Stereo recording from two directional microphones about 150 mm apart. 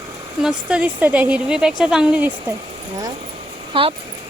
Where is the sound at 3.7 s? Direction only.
35° right (ahead or behind).